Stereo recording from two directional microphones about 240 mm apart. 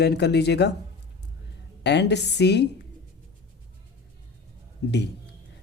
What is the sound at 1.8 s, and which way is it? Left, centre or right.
Speech, left.